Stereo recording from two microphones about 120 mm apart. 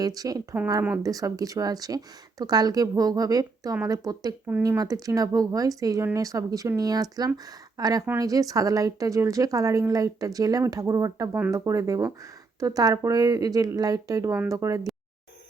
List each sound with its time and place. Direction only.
0.0 s a woman's voice: 30° right (ahead or behind)